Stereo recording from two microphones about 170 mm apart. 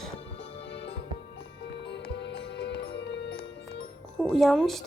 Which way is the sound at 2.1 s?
90° left.